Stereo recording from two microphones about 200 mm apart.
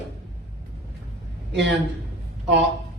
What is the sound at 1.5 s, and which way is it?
Speech, 60° right (ahead or behind).